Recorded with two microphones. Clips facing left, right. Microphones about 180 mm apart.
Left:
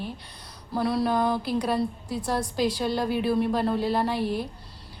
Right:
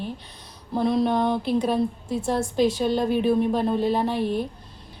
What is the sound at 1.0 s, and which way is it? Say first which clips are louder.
Speech: right 1 dB; 25° right (ahead or behind).